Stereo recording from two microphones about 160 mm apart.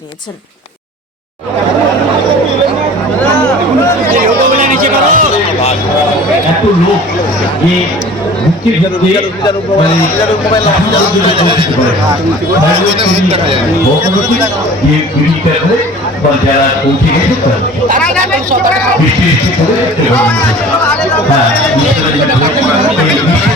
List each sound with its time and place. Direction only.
4.6 s speech: 55° right (ahead or behind)
13.0 s a man's voice: 40° right (ahead or behind)